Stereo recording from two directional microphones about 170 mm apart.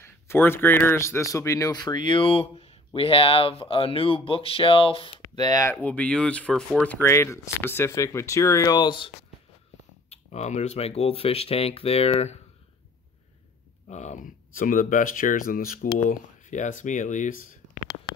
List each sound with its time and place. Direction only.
0.0 s speech: 15° left (ahead or behind)
10.0 s speech: 40° left (ahead or behind)
13.8 s speech: 45° left (ahead or behind)